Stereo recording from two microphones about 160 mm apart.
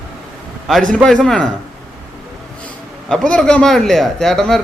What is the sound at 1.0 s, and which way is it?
Speech, 5° left (ahead or behind).